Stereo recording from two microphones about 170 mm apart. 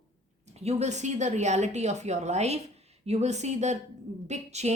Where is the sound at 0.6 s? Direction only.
40° right (ahead or behind).